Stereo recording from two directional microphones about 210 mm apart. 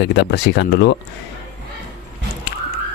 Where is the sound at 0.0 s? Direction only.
55° left (ahead or behind).